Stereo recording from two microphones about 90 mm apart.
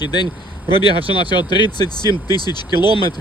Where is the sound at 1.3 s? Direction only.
55° left (ahead or behind).